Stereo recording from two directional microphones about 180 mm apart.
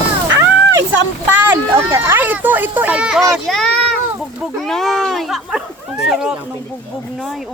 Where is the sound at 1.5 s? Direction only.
15° right (ahead or behind); by 3.9 s centre (ahead or behind).